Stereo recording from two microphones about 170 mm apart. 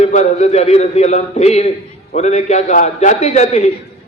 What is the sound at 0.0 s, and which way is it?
A man's voice, 45° left (ahead or behind).